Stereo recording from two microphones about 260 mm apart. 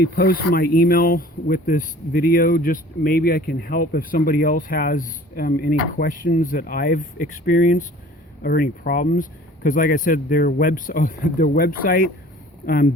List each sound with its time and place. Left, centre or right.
0.0 s speech: left